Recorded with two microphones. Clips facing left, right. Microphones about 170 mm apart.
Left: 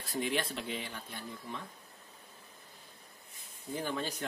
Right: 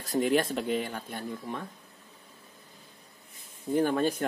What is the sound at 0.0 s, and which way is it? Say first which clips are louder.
Speech: right 9 dB; 45° right (ahead or behind).